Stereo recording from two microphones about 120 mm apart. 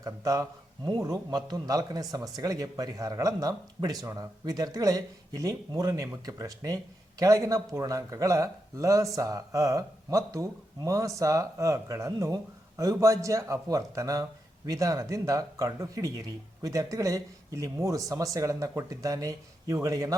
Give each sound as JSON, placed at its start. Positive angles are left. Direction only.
{"t": 0.0, "sound": "speech", "side_deg": -30}